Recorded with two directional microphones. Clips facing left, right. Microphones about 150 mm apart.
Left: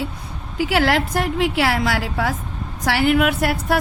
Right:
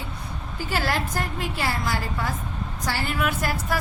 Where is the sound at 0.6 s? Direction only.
75° left (ahead or behind).